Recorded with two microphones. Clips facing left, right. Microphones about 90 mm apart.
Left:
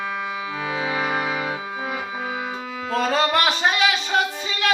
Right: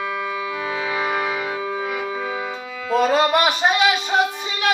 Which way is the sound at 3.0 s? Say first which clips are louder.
Right 3 dB; 15° right (ahead or behind).